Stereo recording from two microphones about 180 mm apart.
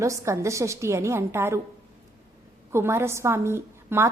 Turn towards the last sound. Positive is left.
turn(degrees=-15)  # may be behind; listen again after turning